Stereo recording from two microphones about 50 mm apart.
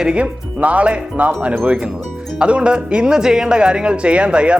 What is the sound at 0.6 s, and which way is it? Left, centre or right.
Speech, right.